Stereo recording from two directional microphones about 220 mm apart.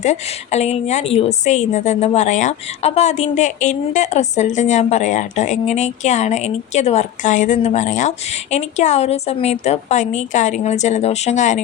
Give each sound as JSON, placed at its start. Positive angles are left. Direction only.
{"t": 0.0, "sound": "a woman's voice", "side_deg": 30}